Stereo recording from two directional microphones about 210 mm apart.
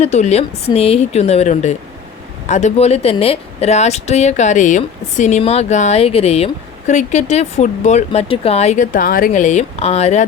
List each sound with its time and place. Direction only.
0.0 s speech: 30° left (ahead or behind)